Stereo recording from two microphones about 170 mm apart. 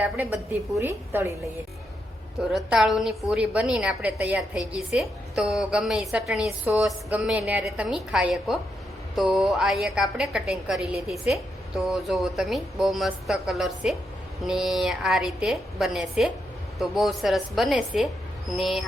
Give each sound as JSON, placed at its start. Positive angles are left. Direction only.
{"t": 0.0, "sound": "a woman's voice", "side_deg": -10}
{"t": 2.6, "sound": "a woman's voice", "side_deg": -5}